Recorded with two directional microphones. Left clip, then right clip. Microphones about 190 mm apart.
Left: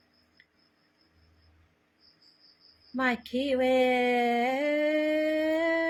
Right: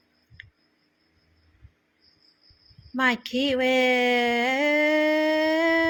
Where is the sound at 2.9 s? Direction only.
30° right (ahead or behind).